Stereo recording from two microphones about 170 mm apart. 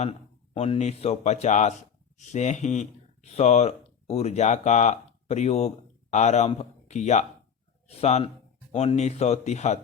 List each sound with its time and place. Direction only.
0.0 s a man's voice: 35° left (ahead or behind)